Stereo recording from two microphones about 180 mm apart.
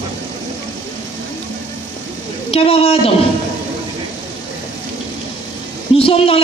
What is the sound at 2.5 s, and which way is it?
Speech, 35° left (ahead or behind).